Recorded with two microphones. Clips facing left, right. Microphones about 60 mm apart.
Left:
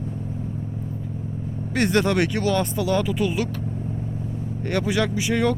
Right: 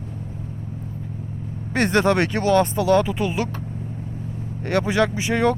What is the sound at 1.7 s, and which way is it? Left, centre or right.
Speech, right.